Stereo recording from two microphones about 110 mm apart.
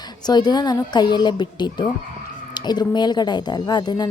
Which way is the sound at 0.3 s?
40° left (ahead or behind).